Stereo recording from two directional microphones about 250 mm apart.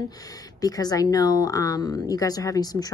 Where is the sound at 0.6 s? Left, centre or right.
Centre.